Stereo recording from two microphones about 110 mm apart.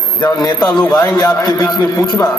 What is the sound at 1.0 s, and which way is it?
Speech, 30° left (ahead or behind).